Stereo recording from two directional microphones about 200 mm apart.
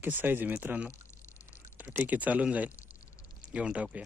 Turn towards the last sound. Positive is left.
turn(degrees=-5)  # may be behind; listen again after turning